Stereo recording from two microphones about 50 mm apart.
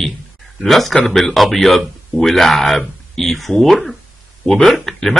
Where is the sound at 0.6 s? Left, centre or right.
Centre.